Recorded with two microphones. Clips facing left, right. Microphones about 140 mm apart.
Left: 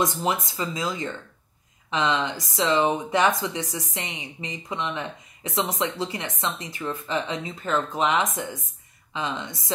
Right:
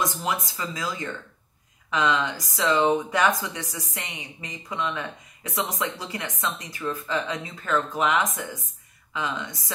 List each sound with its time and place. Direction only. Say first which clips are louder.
0.0 s speech: left 3 dB; 25° left (ahead or behind)